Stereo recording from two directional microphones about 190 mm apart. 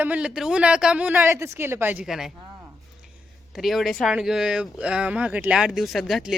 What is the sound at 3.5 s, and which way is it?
A woman's voice, centre (ahead or behind).